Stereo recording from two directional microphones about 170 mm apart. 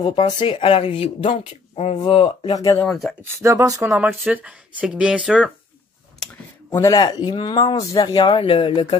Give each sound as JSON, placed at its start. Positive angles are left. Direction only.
{"t": 0.0, "sound": "speech", "side_deg": 30}
{"t": 2.8, "sound": "speech", "side_deg": 0}
{"t": 3.4, "sound": "speech", "side_deg": -20}
{"t": 3.9, "sound": "speech", "side_deg": 0}
{"t": 6.7, "sound": "speech", "side_deg": 20}